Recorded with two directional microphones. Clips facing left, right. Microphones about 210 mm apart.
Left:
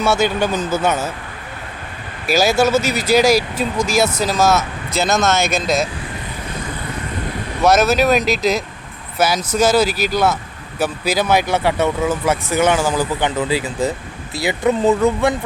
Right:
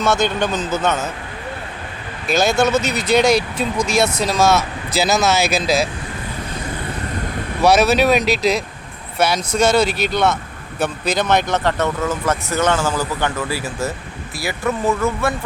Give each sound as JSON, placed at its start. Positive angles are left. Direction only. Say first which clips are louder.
{"t": 0.0, "sound": "speech", "louder": "left 1 dB", "side_deg": 10}
{"t": 2.2, "sound": "speech", "louder": "left 1 dB", "side_deg": 5}
{"t": 7.6, "sound": "speech", "louder": "even", "side_deg": 0}